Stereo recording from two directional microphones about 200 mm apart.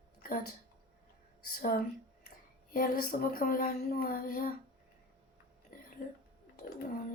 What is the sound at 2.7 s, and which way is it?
Speech, 45° left (ahead or behind).